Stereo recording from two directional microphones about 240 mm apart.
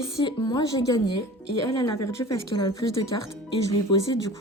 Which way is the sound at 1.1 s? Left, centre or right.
Left.